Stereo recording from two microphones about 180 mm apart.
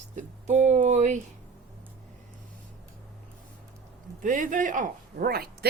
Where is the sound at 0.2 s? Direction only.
40° right (ahead or behind).